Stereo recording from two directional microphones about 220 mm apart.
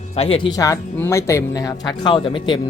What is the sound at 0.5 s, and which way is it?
Speech, 15° left (ahead or behind).